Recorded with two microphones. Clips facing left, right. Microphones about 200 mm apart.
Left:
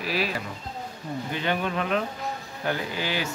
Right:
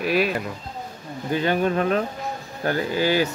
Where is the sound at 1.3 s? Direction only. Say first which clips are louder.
Right 7 dB; 40° right (ahead or behind).